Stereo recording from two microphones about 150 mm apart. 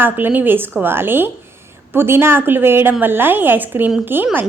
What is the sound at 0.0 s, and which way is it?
A woman's voice, 15° right (ahead or behind).